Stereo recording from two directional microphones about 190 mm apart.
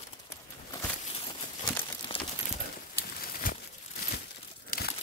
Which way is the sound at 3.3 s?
50° left (ahead or behind).